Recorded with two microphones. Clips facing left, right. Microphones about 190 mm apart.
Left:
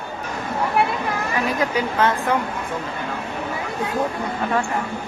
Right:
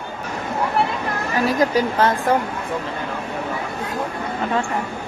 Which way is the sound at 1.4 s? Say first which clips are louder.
Right 6 dB; 40° right (ahead or behind).